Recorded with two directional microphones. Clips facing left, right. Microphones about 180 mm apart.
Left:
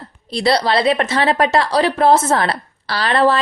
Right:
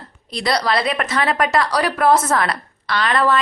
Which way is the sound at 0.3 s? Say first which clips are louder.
Left 4 dB; 30° left (ahead or behind).